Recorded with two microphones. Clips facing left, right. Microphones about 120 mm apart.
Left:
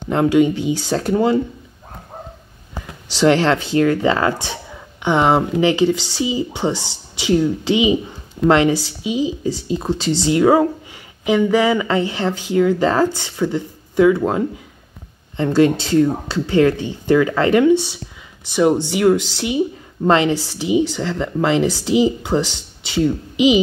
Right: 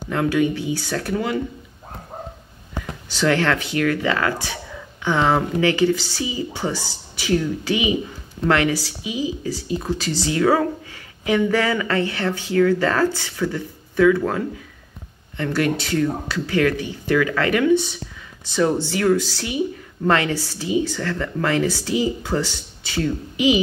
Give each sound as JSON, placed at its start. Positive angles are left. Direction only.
{"t": 0.1, "sound": "speech", "side_deg": 25}
{"t": 3.2, "sound": "speech", "side_deg": 30}